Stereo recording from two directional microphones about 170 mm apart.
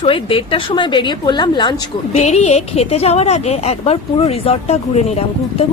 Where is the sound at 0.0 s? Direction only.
30° left (ahead or behind).